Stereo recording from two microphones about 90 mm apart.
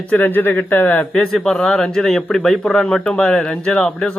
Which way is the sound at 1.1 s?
5° left (ahead or behind).